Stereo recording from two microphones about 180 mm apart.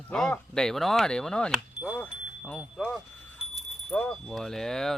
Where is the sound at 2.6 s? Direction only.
Centre (ahead or behind).